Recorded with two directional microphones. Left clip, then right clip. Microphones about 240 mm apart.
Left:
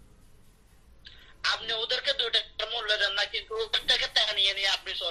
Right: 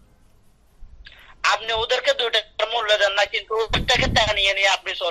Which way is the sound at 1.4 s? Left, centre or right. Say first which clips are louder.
Right 8 dB; right.